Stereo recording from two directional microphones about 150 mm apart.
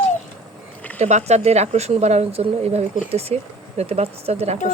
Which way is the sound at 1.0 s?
50° right (ahead or behind).